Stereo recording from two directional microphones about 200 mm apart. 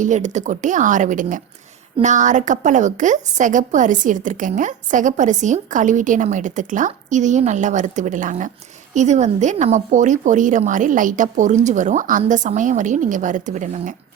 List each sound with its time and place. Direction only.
0.0 s a woman's voice: 35° right (ahead or behind)